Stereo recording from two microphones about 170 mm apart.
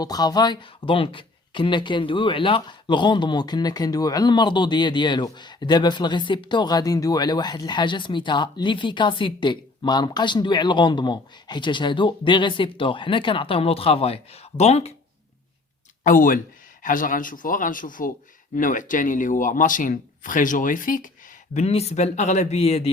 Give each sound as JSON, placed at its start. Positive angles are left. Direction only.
{"t": 0.0, "sound": "speech", "side_deg": 25}
{"t": 16.0, "sound": "speech", "side_deg": 55}
{"t": 21.5, "sound": "speech", "side_deg": 40}